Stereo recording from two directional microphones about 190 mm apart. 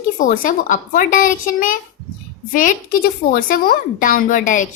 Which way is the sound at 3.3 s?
45° left (ahead or behind).